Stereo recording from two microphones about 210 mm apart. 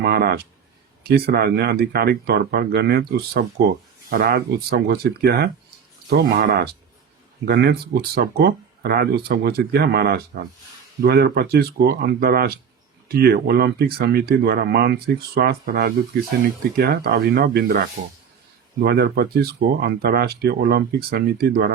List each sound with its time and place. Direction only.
0.0 s speech: 50° right (ahead or behind)